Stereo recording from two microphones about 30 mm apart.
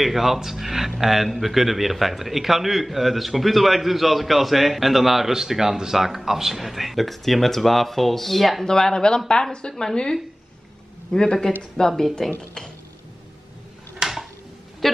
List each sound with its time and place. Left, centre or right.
0.0 s speech: centre
8.6 s speech: left
11.1 s speech: left
13.9 s a sound: centre